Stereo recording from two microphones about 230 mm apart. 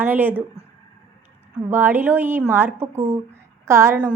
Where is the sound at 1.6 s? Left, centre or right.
Centre.